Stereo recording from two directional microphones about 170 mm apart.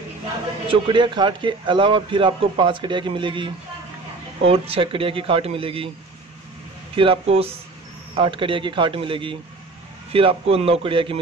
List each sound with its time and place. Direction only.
0.7 s a man's voice: 30° right (ahead or behind)
7.0 s speech: 35° right (ahead or behind)